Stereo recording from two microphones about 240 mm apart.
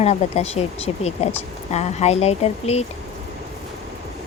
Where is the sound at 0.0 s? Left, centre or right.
Left.